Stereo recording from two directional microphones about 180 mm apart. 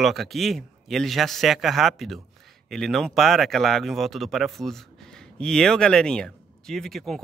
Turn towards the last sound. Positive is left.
turn(degrees=0)  # may be behind; listen again after turning